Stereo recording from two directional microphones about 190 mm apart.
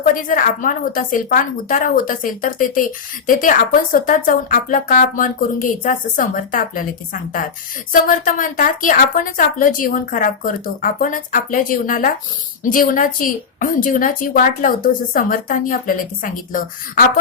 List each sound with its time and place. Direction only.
0.0 s a woman's voice: 45° left (ahead or behind)